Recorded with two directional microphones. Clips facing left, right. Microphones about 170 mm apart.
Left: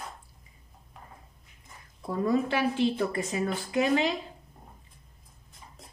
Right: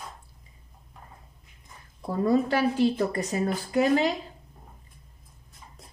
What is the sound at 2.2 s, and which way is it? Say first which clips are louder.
A woman's voice: right 3 dB; 40° right (ahead or behind).